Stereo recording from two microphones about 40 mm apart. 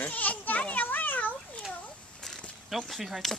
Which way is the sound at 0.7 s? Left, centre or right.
Left.